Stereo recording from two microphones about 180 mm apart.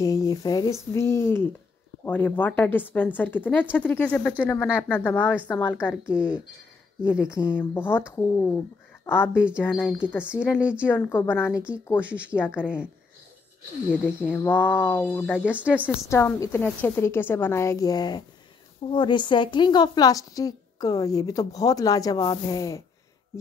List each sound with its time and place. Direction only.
0.0 s a woman's voice: 20° left (ahead or behind)
5.8 s speech: 5° right (ahead or behind)
7.5 s a woman's voice: 10° left (ahead or behind)
9.3 s speech: 5° right (ahead or behind)
9.6 s a woman's voice: 10° left (ahead or behind)
10.6 s speech: 5° right (ahead or behind)
10.9 s a woman's voice: 10° left (ahead or behind)
12.0 s speech: 5° right (ahead or behind)
12.4 s a woman's voice: 10° left (ahead or behind)
12.6 s speech: 5° right (ahead or behind)
14.3 s a woman's voice: 10° left (ahead or behind)
15.4 s speech: 5° right (ahead or behind)
16.1 s a woman's voice: 15° left (ahead or behind)